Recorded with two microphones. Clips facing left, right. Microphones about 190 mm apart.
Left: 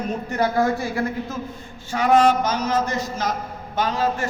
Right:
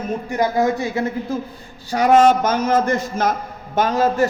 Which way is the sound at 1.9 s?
45° right (ahead or behind).